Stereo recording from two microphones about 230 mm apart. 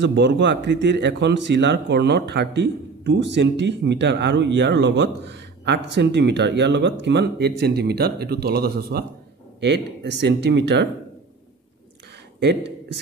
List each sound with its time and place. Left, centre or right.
0.0 s speech: right
10.2 s speech: right
12.4 s speech: right